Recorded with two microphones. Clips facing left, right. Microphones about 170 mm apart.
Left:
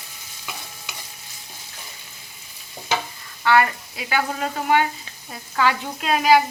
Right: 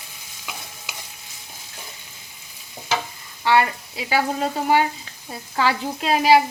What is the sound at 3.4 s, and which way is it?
Speech, 25° right (ahead or behind).